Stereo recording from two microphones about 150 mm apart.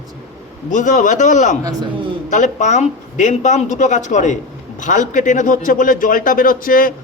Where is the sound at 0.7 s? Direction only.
55° left (ahead or behind).